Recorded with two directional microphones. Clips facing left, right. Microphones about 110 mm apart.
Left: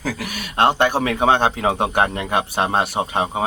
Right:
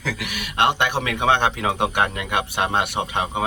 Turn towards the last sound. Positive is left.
turn(degrees=35)  # may be behind; listen again after turning